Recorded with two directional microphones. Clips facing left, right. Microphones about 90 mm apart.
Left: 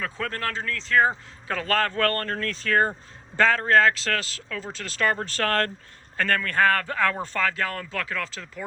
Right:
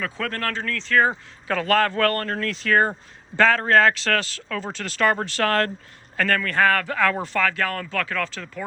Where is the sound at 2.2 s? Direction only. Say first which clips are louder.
Right 3 dB; 40° right (ahead or behind).